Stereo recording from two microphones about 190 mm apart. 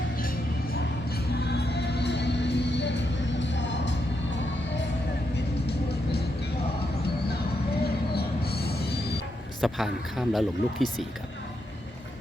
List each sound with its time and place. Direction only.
1.5 s music: 60° left (ahead or behind)
5.6 s music: 60° left (ahead or behind)
8.1 s train wheels squealing: 55° left (ahead or behind)
9.6 s speech: centre (ahead or behind)